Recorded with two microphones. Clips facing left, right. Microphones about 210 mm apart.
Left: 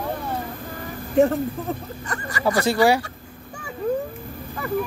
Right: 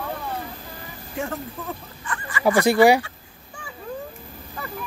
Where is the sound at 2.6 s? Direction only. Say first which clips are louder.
Right 3 dB; 15° right (ahead or behind).